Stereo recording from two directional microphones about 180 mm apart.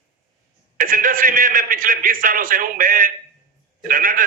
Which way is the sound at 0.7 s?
50° right (ahead or behind).